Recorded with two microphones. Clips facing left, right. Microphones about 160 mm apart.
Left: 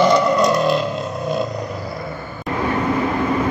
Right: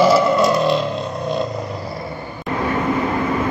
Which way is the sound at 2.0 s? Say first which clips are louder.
Even; 20° right (ahead or behind).